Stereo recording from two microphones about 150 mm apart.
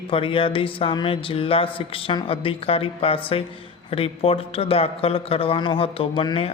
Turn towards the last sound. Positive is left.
turn(degrees=35)  # may be behind; listen again after turning